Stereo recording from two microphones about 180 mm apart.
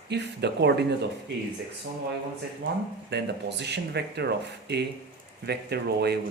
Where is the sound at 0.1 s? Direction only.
70° right (ahead or behind).